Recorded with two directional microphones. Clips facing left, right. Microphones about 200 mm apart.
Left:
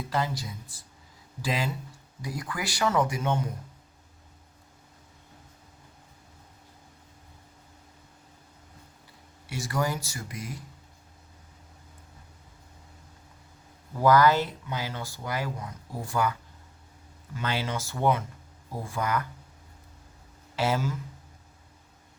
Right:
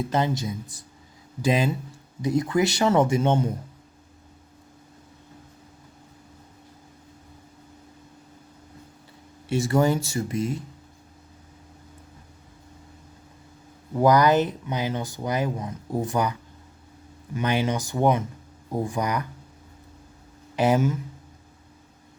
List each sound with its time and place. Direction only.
0.0 s speech: 20° right (ahead or behind)
9.5 s speech: 25° right (ahead or behind)
13.9 s speech: 20° right (ahead or behind)
20.6 s speech: 20° right (ahead or behind)